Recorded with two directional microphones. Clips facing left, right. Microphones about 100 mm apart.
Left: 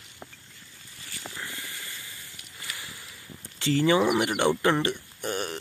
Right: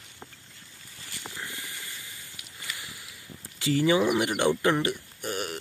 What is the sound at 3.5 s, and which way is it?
Speech, 10° right (ahead or behind).